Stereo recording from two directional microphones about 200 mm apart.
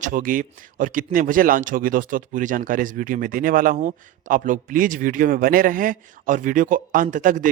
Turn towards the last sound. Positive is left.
turn(degrees=-40)  # may be behind; listen again after turning